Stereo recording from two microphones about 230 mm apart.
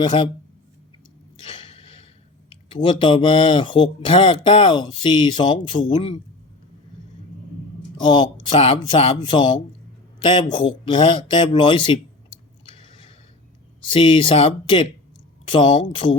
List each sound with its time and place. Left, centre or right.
0.0 s speech: left
1.4 s a sound: left
2.5 s speech: left
8.0 s speech: centre
12.6 s biting: left
13.9 s speech: left